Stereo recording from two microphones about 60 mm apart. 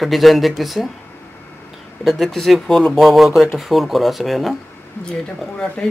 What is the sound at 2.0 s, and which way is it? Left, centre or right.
Speech, centre.